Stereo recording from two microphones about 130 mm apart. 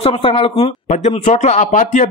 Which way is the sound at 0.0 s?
45° left (ahead or behind).